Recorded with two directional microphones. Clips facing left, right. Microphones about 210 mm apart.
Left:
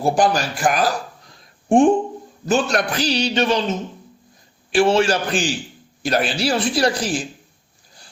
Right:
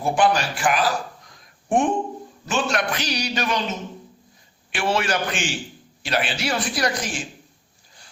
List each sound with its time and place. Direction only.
0.0 s a man's voice: 35° left (ahead or behind)
1.3 s a sound: 30° left (ahead or behind)
2.5 s a man's voice: 40° left (ahead or behind)
4.7 s a man's voice: 30° left (ahead or behind)